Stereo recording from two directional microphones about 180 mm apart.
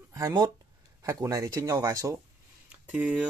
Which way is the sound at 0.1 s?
20° right (ahead or behind).